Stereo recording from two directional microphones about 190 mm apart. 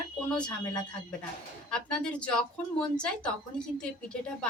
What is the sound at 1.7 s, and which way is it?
A woman's voice, 5° left (ahead or behind).